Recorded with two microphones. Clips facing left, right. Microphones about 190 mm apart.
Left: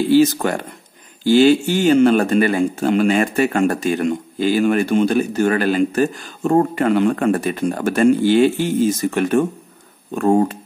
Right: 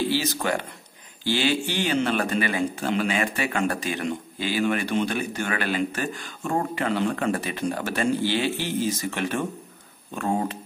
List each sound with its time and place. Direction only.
0.1 s speech: 45° left (ahead or behind)